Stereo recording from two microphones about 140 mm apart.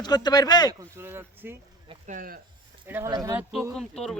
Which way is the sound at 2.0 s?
80° right.